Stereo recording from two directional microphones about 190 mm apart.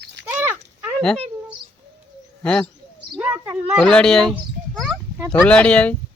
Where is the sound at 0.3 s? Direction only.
10° right (ahead or behind).